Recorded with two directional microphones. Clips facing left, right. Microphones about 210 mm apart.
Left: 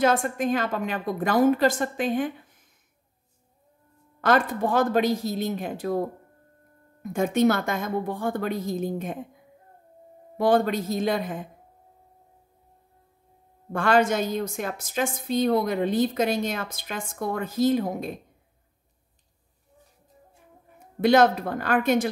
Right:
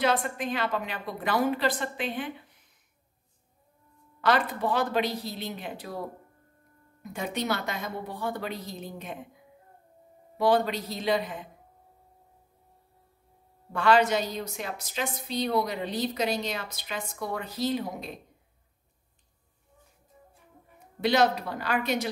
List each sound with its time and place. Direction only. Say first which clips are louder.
0.0 s a woman's voice: left 5 dB; 45° left (ahead or behind)
4.2 s a woman's voice: left 4 dB; 45° left (ahead or behind)
10.3 s a woman's voice: left 3 dB; 50° left (ahead or behind)
13.7 s a woman's voice: left 2 dB; 50° left (ahead or behind)
21.0 s a woman's voice: left 5 dB; 50° left (ahead or behind)